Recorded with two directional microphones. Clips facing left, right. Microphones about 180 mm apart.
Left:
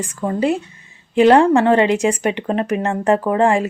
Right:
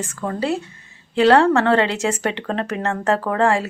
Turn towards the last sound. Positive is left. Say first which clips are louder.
# left 3 dB
turn(degrees=15)  # may be behind; listen again after turning